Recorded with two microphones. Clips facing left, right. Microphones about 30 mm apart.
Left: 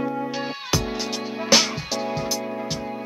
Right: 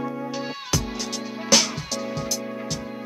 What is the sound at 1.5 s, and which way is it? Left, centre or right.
Music, left.